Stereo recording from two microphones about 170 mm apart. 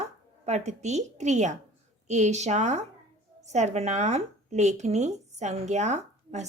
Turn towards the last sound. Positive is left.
turn(degrees=-45)  # may be behind; listen again after turning